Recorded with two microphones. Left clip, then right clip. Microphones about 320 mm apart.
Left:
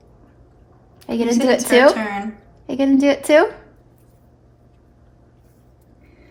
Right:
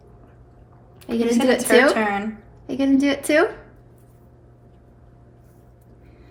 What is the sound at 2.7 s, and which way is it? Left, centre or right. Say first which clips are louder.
Speech: left 4 dB; left.